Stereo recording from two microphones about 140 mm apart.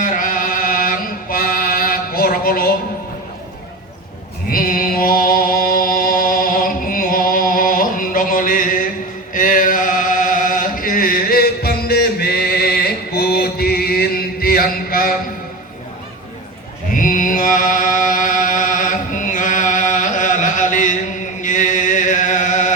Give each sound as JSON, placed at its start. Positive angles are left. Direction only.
{"t": 0.0, "sound": "chant", "side_deg": 75}
{"t": 4.4, "sound": "a sound", "side_deg": 90}
{"t": 9.3, "sound": "chant", "side_deg": 70}
{"t": 12.2, "sound": "mantra", "side_deg": 90}
{"t": 16.9, "sound": "chant", "side_deg": 70}